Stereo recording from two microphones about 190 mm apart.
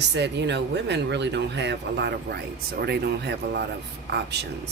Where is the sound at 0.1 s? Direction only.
65° right (ahead or behind).